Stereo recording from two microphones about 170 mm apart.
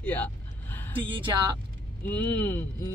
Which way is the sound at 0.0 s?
10° left (ahead or behind).